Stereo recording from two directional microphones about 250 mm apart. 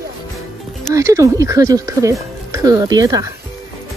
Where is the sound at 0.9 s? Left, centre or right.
Centre.